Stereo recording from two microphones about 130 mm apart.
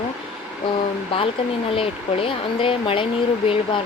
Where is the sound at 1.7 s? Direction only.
45° left (ahead or behind).